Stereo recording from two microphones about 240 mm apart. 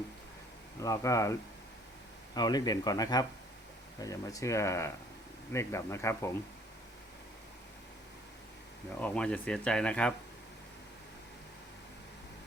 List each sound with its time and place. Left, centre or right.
0.8 s speech: centre
9.0 s speech: centre